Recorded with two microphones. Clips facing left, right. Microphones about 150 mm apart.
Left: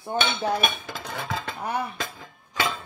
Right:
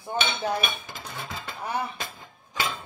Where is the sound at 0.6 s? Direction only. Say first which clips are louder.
Left 5 dB; 90° left.